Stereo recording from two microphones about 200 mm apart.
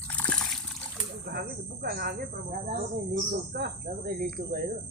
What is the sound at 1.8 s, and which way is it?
Speech, 50° right (ahead or behind).